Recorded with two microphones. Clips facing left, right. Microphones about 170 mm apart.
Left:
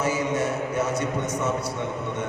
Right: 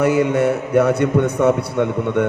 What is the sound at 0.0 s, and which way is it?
A man's voice, 60° right (ahead or behind).